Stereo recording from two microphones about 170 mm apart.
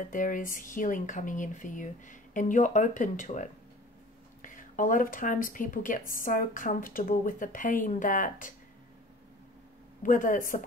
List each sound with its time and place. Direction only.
0.1 s speech: 50° left (ahead or behind)
10.0 s speech: 50° left (ahead or behind)